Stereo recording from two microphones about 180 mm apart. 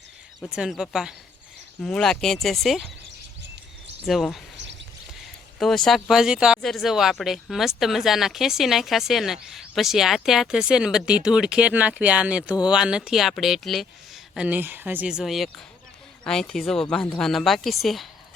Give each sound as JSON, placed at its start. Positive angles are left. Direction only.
{"t": 0.5, "sound": "speech", "side_deg": -5}
{"t": 4.0, "sound": "speech", "side_deg": 0}
{"t": 4.5, "sound": "a sound", "side_deg": -80}
{"t": 5.5, "sound": "speech", "side_deg": 0}